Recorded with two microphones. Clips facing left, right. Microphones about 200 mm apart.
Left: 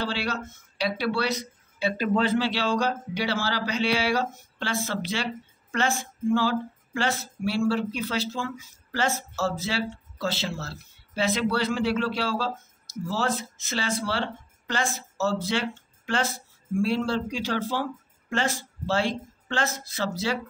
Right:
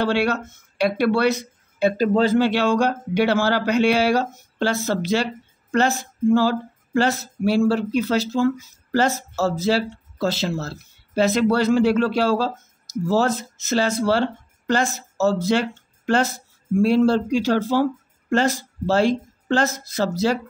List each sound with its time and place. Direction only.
0.0 s speech: 60° right (ahead or behind)
1.8 s speech: 45° right (ahead or behind)